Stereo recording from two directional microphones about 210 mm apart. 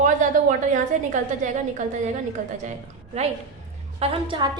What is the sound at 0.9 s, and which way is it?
Speech, 35° right (ahead or behind).